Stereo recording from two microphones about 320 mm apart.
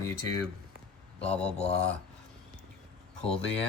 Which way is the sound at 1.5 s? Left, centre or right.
Centre.